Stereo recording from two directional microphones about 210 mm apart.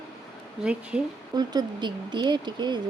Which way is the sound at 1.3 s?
20° right (ahead or behind).